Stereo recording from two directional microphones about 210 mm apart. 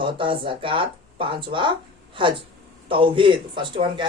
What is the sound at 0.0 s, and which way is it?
Speech, 25° right (ahead or behind).